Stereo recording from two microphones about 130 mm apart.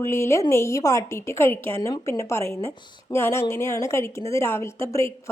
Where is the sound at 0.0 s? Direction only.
20° left (ahead or behind).